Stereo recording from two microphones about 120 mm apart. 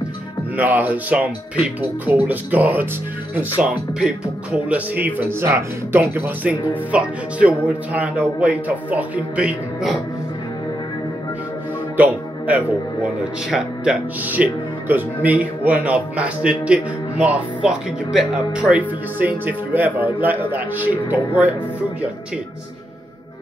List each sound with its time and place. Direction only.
0.6 s speech: 15° right (ahead or behind)
4.0 s speech: 10° right (ahead or behind)
12.0 s speech: 15° right (ahead or behind)